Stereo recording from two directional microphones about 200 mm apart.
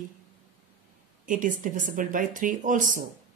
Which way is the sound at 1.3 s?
40° right (ahead or behind).